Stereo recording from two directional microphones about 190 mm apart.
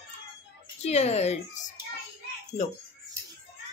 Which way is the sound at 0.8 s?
35° left (ahead or behind).